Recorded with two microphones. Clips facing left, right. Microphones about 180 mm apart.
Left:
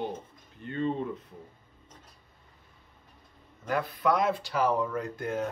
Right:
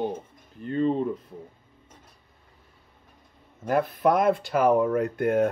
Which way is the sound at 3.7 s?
55° right (ahead or behind).